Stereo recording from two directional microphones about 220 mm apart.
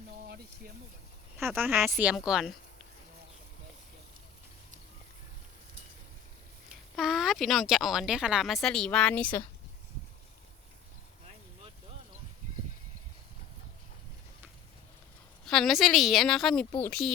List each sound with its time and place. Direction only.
0.3 s speech: 45° right (ahead or behind)
1.5 s speech: 10° right (ahead or behind)
6.7 s speech: centre (ahead or behind)
15.4 s speech: centre (ahead or behind)